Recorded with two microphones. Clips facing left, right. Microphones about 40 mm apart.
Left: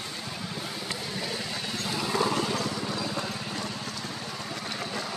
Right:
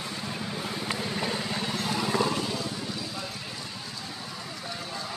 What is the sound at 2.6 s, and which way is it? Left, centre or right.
Vehicle, left.